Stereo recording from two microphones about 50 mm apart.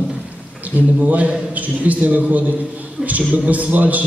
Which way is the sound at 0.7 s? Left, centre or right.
Right.